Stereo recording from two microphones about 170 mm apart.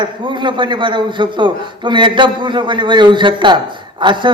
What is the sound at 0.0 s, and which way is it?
A man's voice, 25° right (ahead or behind).